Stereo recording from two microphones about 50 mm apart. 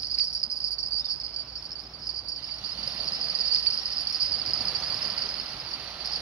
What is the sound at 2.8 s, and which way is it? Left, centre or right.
Cricket, right.